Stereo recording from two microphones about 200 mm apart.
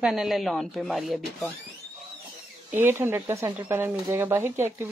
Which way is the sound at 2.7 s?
10° right (ahead or behind).